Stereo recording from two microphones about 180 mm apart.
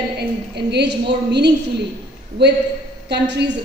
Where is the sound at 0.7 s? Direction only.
70° right (ahead or behind).